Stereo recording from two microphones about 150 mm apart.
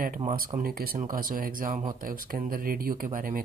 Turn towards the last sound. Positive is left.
turn(degrees=-65)  # may be behind; listen again after turning